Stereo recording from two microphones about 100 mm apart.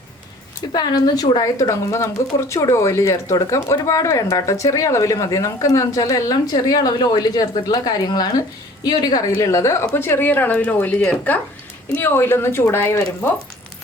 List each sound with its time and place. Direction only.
0.7 s a woman's voice: 45° left (ahead or behind); by 13.3 s 20° left (ahead or behind)